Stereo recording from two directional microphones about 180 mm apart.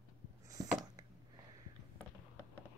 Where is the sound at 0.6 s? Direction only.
20° right (ahead or behind).